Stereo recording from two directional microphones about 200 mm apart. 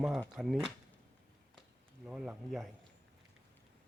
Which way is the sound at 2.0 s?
5° right (ahead or behind).